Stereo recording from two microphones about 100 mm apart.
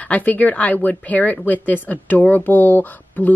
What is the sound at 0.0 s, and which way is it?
A woman's voice, 15° left (ahead or behind).